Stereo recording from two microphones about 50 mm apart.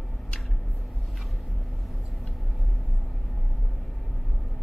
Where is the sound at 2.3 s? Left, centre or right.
Centre.